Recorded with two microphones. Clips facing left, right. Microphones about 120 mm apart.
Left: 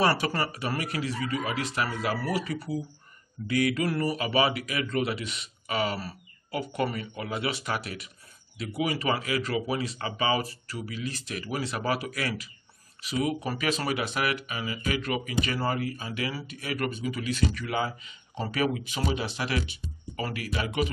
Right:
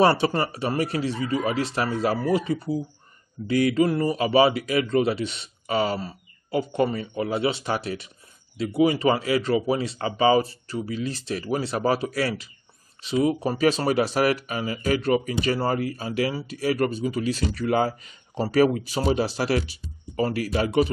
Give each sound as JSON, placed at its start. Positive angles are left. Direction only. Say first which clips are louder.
{"t": 0.0, "sound": "a man's voice", "louder": "right 6 dB", "side_deg": -25}